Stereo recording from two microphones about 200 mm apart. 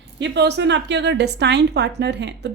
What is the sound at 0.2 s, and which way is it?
A woman's voice, 55° right (ahead or behind).